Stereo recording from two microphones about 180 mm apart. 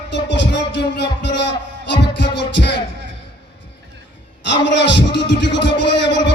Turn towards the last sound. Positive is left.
turn(degrees=80)